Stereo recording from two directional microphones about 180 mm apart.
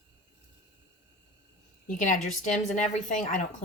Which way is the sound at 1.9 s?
45° left (ahead or behind).